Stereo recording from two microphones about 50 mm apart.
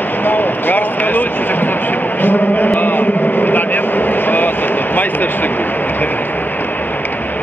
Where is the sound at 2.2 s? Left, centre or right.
Left.